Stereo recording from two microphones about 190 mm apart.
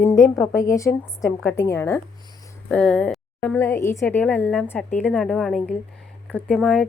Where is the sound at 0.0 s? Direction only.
15° left (ahead or behind).